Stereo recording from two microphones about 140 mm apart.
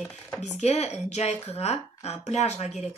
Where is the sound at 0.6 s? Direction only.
50° left (ahead or behind).